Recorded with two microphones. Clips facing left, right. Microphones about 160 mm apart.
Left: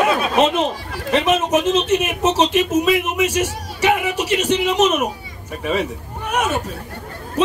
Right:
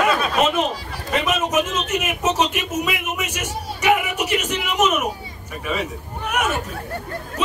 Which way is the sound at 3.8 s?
30° left (ahead or behind).